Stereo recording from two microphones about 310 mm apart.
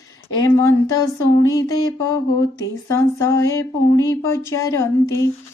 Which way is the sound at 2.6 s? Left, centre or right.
Centre.